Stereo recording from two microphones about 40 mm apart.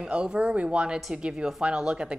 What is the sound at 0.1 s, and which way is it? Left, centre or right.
A woman's voice, right.